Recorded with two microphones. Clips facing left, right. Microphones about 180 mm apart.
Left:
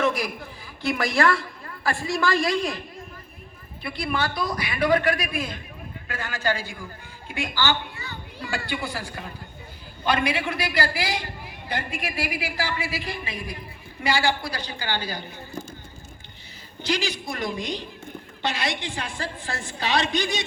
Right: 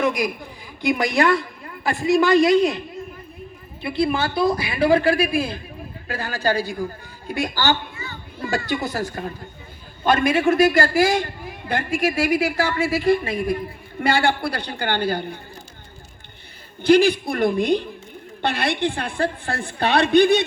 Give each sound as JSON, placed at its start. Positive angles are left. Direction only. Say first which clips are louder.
{"t": 0.0, "sound": "a sound", "louder": "right 3 dB", "side_deg": -15}
{"t": 0.8, "sound": "a man's voice", "louder": "right 3 dB", "side_deg": -15}
{"t": 3.8, "sound": "a man's voice", "louder": "right 6 dB", "side_deg": -25}
{"t": 12.5, "sound": "a woman's voice", "louder": "right 8 dB", "side_deg": -60}
{"t": 16.8, "sound": "a woman's voice", "louder": "right 12 dB", "side_deg": -55}